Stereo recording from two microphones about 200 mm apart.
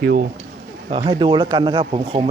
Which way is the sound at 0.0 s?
50° right (ahead or behind).